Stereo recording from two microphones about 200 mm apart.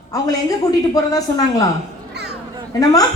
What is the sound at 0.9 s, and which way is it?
Speech, 20° left (ahead or behind).